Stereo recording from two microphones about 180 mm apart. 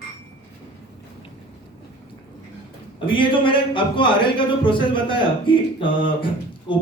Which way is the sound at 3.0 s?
30° left (ahead or behind).